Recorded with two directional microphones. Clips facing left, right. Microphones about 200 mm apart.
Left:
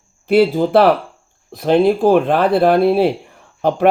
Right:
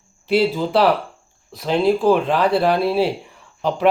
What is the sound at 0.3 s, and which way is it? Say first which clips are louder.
Speech: left 5 dB; 55° left (ahead or behind).